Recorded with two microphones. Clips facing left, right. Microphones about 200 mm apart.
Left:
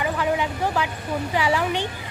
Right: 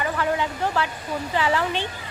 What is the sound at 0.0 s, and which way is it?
Vehicle, 15° left (ahead or behind).